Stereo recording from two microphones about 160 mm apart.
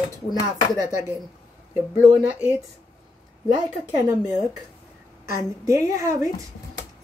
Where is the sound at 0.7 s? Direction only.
20° right (ahead or behind).